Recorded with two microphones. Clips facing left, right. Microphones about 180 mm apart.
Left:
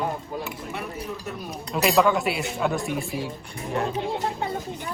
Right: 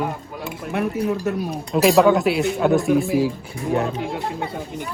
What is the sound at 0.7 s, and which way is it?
Speech, 65° right (ahead or behind).